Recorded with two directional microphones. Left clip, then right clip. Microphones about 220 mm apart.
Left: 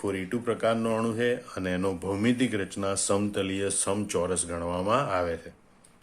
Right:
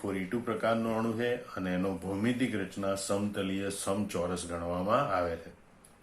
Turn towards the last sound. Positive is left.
turn(degrees=40)  # may be behind; listen again after turning